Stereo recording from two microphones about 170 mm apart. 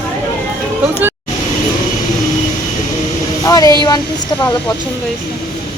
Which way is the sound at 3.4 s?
20° left (ahead or behind).